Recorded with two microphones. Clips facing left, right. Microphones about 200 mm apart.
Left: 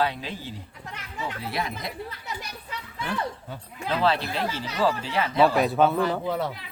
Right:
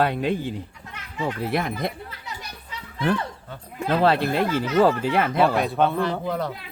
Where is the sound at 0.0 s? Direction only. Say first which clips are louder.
Right 6 dB; 55° right (ahead or behind).